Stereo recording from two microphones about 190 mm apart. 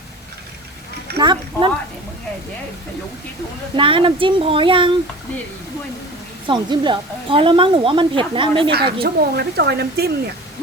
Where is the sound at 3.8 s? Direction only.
25° right (ahead or behind).